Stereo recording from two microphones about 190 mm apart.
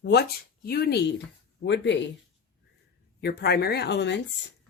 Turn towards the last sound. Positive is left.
turn(degrees=65)  # may be behind; listen again after turning